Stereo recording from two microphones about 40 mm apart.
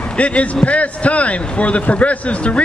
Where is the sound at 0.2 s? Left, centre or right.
Left.